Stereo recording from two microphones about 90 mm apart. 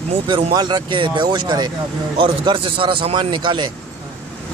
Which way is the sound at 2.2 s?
75° right (ahead or behind).